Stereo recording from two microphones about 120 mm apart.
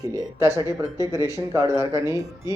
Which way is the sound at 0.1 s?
25° right (ahead or behind).